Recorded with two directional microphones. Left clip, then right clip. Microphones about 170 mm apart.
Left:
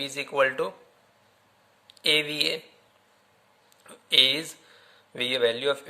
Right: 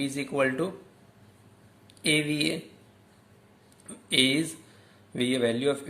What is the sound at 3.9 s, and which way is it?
A man's voice, 30° left (ahead or behind).